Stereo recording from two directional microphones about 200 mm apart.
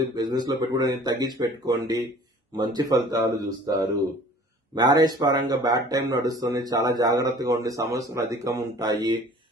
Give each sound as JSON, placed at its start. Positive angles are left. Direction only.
{"t": 0.0, "sound": "speech", "side_deg": -20}